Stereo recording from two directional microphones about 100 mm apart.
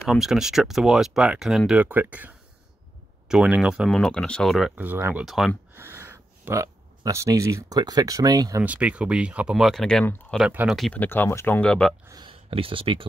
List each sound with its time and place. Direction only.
0.0 s speech: 5° right (ahead or behind)
3.9 s speech: 5° left (ahead or behind)
4.7 s speech: 20° right (ahead or behind)
5.2 s speech: 5° right (ahead or behind)
5.8 s a sound: 25° right (ahead or behind)
7.1 s speech: 30° right (ahead or behind)
8.6 s speech: 15° right (ahead or behind); by 10.5 s 10° left (ahead or behind)
10.9 s speech: 20° left (ahead or behind)
12.3 s speech: 65° right (ahead or behind)